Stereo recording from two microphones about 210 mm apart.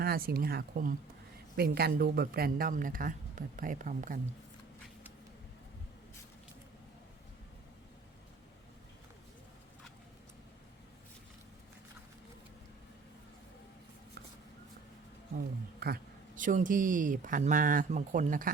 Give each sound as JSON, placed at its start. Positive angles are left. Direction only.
{"t": 0.0, "sound": "speech", "side_deg": -45}
{"t": 15.8, "sound": "speech", "side_deg": -45}